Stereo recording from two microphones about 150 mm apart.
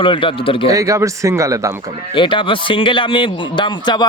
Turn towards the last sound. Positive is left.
turn(degrees=30)  # may be behind; listen again after turning